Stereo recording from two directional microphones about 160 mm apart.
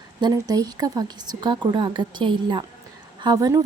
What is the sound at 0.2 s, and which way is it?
A woman's voice, 25° right (ahead or behind).